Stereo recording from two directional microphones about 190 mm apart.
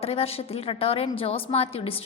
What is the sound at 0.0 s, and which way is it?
A woman's voice, 30° left (ahead or behind).